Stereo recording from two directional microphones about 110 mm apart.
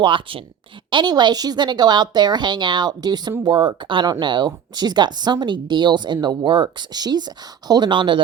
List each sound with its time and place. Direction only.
0.0 s a woman's voice: 50° right (ahead or behind)